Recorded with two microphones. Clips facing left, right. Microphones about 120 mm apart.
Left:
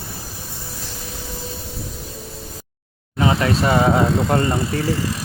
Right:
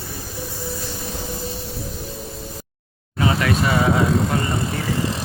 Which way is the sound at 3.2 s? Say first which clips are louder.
Left 2 dB; 30° left (ahead or behind).